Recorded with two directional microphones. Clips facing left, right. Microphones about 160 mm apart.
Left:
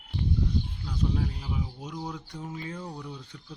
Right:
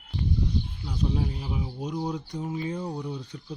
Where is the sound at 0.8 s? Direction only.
20° right (ahead or behind).